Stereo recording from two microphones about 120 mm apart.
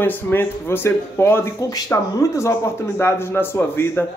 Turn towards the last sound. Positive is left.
turn(degrees=20)  # may be behind; listen again after turning